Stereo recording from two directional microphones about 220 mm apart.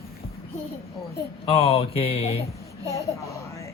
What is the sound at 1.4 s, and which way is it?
Speech, 25° left (ahead or behind).